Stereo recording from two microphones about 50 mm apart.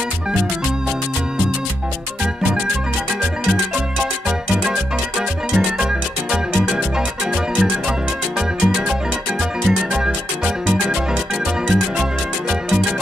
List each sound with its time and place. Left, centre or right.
5.5 s music: centre
8.4 s music: centre